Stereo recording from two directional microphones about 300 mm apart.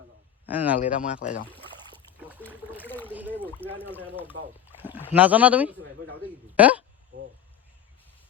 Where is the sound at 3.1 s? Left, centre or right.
Centre.